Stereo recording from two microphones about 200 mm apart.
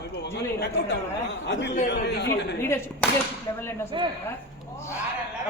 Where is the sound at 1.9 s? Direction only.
60° left (ahead or behind).